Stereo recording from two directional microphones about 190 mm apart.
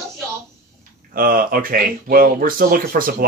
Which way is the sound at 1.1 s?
50° right (ahead or behind).